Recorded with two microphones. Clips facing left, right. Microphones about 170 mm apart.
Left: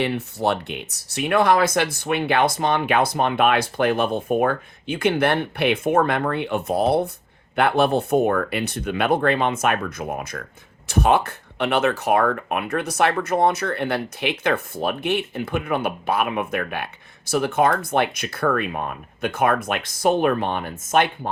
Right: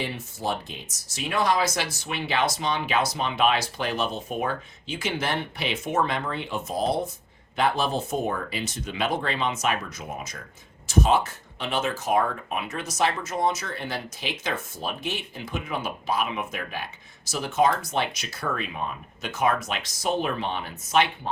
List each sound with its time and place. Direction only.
0.0 s speech: 65° left (ahead or behind)